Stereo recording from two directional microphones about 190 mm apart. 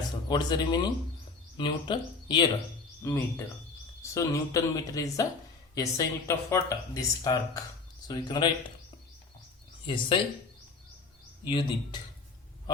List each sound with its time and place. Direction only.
0.3 s speech: 25° left (ahead or behind)
3.0 s speech: 15° left (ahead or behind)
9.8 s speech: 25° left (ahead or behind)
11.4 s speech: 25° left (ahead or behind)